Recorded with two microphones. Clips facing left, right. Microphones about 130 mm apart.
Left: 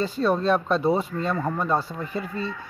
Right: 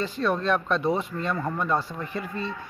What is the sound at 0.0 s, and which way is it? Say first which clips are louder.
A man's voice: left 3 dB; 30° left (ahead or behind).